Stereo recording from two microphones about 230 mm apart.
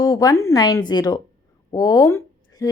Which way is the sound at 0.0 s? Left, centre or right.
Centre.